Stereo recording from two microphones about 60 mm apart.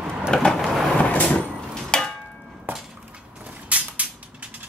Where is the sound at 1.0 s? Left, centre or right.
Left.